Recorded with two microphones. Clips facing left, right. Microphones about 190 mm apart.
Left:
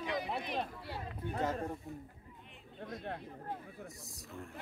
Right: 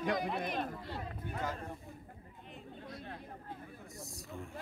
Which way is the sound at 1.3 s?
30° left (ahead or behind).